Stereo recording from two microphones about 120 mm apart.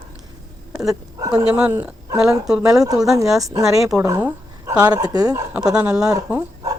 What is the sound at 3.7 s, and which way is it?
Speech, 5° right (ahead or behind).